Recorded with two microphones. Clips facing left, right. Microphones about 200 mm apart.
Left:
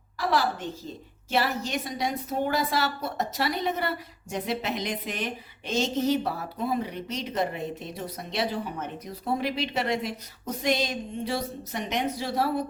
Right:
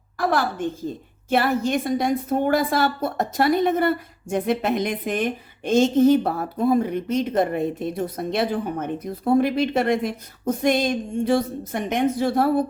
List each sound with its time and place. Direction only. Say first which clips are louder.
0.2 s a woman's voice: right 4 dB; 50° right (ahead or behind)